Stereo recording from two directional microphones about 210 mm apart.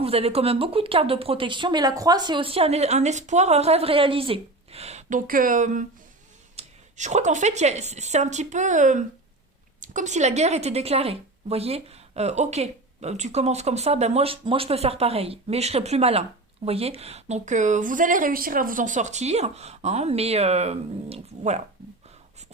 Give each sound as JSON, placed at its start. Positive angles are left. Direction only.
{"t": 0.0, "sound": "a woman's voice", "side_deg": -30}